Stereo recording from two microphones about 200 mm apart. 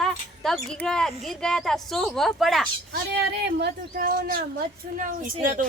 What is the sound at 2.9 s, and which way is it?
Speech, 55° right (ahead or behind).